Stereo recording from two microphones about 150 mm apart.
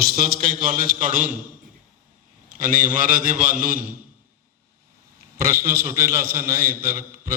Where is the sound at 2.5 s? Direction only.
65° right (ahead or behind).